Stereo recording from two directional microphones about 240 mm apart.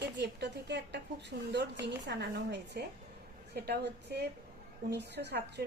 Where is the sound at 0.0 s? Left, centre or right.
Right.